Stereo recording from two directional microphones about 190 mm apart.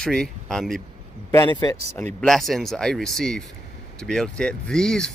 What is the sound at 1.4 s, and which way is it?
Speech, 25° left (ahead or behind).